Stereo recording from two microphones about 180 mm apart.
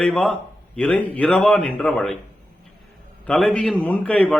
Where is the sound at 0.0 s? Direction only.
5° left (ahead or behind).